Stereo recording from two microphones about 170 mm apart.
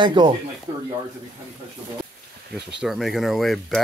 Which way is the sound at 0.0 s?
25° right (ahead or behind).